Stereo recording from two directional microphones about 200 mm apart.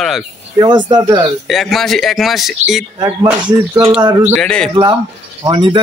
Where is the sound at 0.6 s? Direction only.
20° right (ahead or behind).